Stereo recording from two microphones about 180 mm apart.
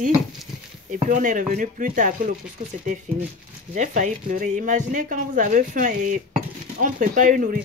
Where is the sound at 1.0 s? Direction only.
45° right (ahead or behind).